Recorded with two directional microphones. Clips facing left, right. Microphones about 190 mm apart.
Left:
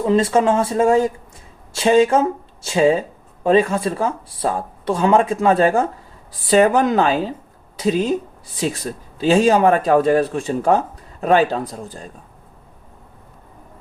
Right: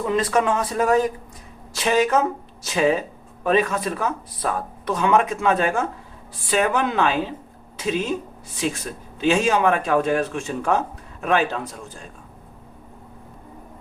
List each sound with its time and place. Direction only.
0.0 s speech: 25° left (ahead or behind)